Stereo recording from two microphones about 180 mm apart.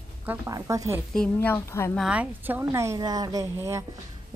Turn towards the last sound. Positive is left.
turn(degrees=-15)  # may be behind; listen again after turning